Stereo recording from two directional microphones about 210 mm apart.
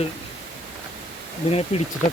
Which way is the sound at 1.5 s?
30° left (ahead or behind).